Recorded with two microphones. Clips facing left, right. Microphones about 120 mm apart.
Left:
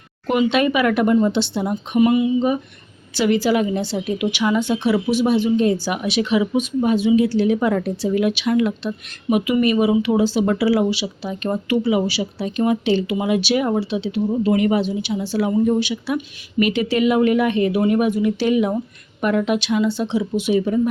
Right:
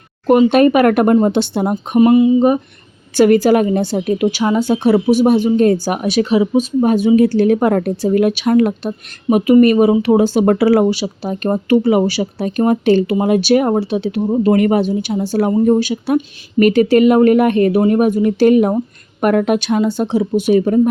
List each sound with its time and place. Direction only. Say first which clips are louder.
0.3 s a woman's voice: right 8 dB; 45° right (ahead or behind)